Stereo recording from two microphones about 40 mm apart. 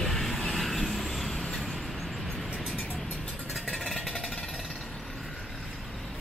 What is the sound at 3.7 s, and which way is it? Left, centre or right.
Vehicle, centre.